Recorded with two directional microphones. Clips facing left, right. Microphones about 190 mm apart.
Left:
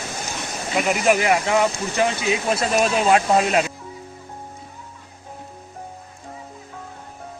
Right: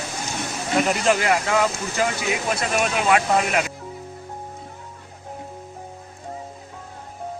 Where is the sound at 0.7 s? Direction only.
10° left (ahead or behind); by 3.6 s 35° left (ahead or behind).